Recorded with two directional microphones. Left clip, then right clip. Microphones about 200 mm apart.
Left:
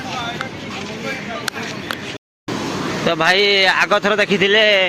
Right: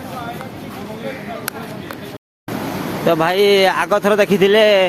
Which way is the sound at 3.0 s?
15° right (ahead or behind).